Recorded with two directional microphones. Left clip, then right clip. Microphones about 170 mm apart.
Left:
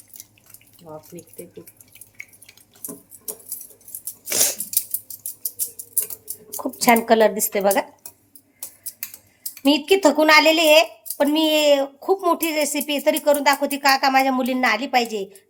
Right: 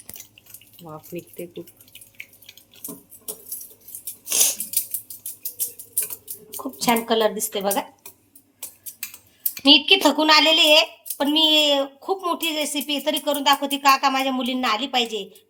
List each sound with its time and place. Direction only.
4.3 s a sound: 50° left (ahead or behind)
6.6 s speech: 50° left (ahead or behind)
9.6 s a woman's voice: 55° left (ahead or behind)